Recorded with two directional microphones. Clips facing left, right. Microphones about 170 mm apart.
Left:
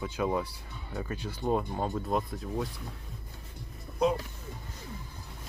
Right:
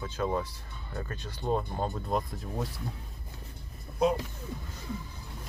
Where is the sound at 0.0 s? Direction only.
10° left (ahead or behind).